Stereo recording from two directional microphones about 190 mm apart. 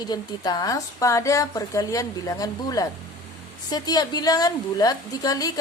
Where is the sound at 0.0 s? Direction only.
20° left (ahead or behind).